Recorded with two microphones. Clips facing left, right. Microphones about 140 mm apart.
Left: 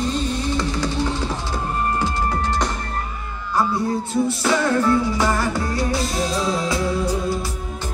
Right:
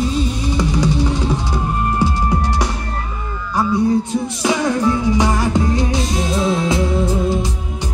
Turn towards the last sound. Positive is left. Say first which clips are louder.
# right 4 dB
turn(degrees=-25)  # may be behind; listen again after turning